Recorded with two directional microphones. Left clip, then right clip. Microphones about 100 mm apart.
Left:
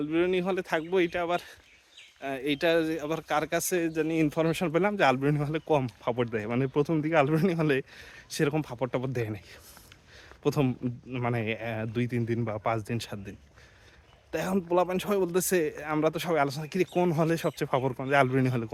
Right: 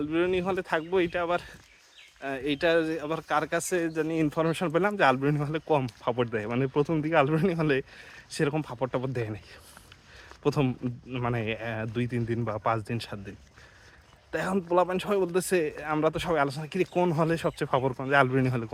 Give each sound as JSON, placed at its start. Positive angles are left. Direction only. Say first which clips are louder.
{"t": 0.0, "sound": "speech", "louder": "even", "side_deg": 40}
{"t": 8.4, "sound": "speech", "louder": "even", "side_deg": 50}
{"t": 10.6, "sound": "speech", "louder": "even", "side_deg": 35}
{"t": 12.5, "sound": "speech", "louder": "right 4 dB", "side_deg": 20}